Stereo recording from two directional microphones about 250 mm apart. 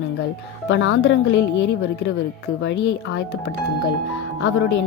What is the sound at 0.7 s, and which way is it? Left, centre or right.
Speech, left.